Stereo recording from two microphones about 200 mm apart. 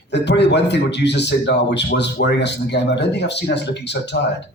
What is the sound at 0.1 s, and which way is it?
Speech, 60° left (ahead or behind).